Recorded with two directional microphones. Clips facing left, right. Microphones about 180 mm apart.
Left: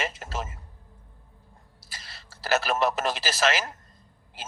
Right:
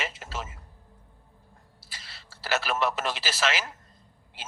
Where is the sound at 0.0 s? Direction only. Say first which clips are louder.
Left 3 dB; 45° left (ahead or behind).